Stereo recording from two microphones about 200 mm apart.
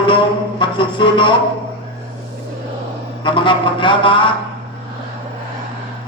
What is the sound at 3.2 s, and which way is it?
Speech, 25° left (ahead or behind).